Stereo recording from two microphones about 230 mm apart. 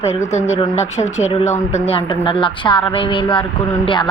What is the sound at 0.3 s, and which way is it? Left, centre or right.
A woman's voice, left.